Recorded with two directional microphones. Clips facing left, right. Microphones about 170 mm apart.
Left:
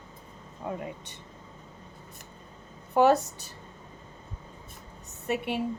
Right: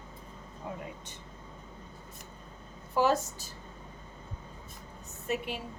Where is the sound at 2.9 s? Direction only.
65° left (ahead or behind).